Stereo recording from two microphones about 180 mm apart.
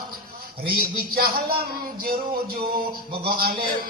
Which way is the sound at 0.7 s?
55° right (ahead or behind).